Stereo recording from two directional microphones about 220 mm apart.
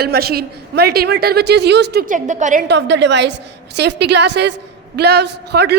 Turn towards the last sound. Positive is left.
turn(degrees=-50)  # may be behind; listen again after turning